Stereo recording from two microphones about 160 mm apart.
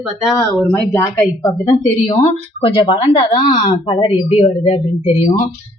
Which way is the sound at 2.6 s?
35° left (ahead or behind).